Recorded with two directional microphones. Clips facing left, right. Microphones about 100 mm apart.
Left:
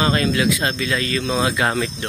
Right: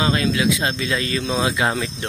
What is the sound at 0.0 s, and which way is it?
Speech, 5° right (ahead or behind).